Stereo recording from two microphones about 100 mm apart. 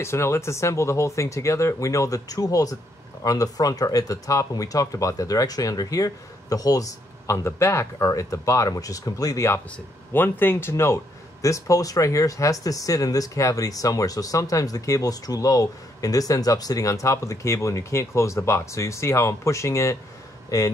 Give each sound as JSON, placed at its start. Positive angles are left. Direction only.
{"t": 0.0, "sound": "speech", "side_deg": 25}
{"t": 9.7, "sound": "speech", "side_deg": 20}